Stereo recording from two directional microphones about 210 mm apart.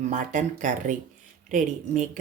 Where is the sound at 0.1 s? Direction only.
35° right (ahead or behind).